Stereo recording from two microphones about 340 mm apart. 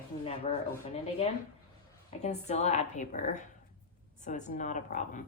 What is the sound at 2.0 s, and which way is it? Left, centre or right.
Speech, centre.